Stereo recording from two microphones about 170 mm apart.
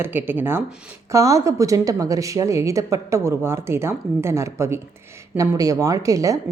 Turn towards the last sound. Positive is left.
turn(degrees=-20)  # may be behind; listen again after turning